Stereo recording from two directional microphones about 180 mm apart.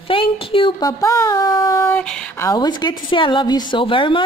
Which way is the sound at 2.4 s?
25° left (ahead or behind).